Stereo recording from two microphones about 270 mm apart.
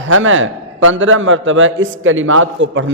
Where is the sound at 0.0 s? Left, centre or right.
Right.